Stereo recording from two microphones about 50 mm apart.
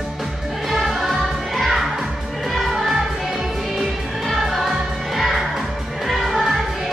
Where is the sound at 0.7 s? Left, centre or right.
Centre.